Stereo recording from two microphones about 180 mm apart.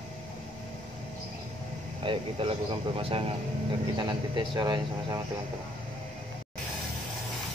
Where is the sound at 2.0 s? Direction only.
30° right (ahead or behind).